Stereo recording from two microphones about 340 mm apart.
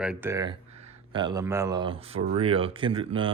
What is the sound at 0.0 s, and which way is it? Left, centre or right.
Speech, centre.